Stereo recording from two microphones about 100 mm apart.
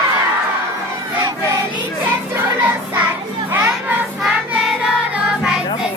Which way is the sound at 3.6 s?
15° right (ahead or behind).